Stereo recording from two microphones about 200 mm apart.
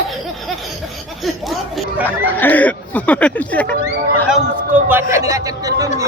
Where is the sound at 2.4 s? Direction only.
10° left (ahead or behind).